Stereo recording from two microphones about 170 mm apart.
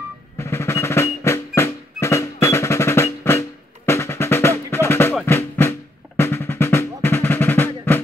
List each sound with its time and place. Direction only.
0.4 s music: 15° left (ahead or behind)
2.4 s percussion: 15° left (ahead or behind)
5.2 s music: 15° left (ahead or behind)